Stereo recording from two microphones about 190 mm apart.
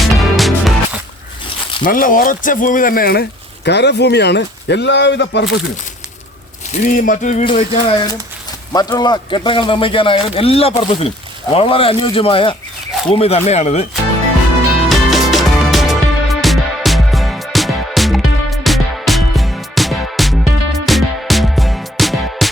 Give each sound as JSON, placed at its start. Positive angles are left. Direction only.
{"t": 0.1, "sound": "music", "side_deg": 0}
{"t": 1.9, "sound": "speech", "side_deg": 45}
{"t": 6.8, "sound": "speech", "side_deg": 45}
{"t": 7.4, "sound": "speech", "side_deg": 30}
{"t": 14.8, "sound": "music", "side_deg": 0}